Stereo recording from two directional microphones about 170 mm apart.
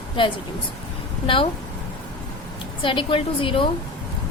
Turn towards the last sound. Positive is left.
turn(degrees=30)  # may be behind; listen again after turning